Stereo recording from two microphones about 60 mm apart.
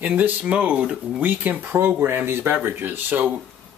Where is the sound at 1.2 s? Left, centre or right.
Right.